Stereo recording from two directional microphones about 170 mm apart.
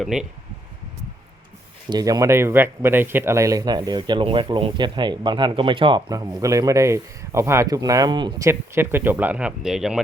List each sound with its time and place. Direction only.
0.0 s speech: 5° right (ahead or behind)
1.9 s speech: 20° right (ahead or behind); by 10.0 s 5° right (ahead or behind)